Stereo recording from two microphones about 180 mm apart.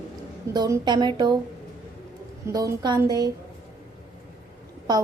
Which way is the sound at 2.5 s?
20° right (ahead or behind).